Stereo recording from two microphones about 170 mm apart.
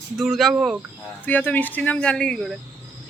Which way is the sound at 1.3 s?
10° left (ahead or behind).